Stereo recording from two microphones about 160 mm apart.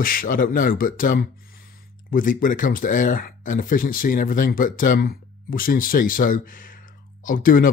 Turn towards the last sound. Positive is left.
turn(degrees=60)  # may be behind; listen again after turning